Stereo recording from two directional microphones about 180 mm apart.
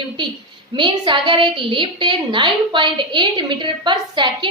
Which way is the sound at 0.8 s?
25° right (ahead or behind).